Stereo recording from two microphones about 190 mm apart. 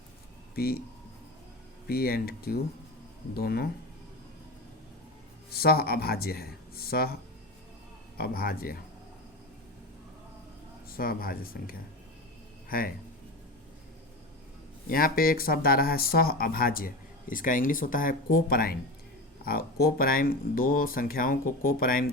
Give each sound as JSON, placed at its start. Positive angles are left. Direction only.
{"t": 0.5, "sound": "speech", "side_deg": 55}
{"t": 1.9, "sound": "speech", "side_deg": 50}
{"t": 5.5, "sound": "speech", "side_deg": 55}
{"t": 8.2, "sound": "speech", "side_deg": 50}
{"t": 10.8, "sound": "a man's voice", "side_deg": 50}
{"t": 14.8, "sound": "speech", "side_deg": 50}